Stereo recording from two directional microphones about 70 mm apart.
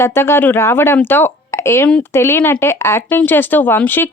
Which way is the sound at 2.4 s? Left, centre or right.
Left.